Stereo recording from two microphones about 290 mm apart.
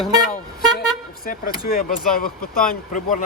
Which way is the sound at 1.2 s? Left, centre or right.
Left.